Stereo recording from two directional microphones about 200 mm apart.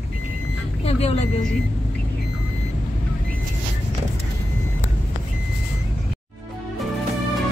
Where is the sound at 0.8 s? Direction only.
30° left (ahead or behind).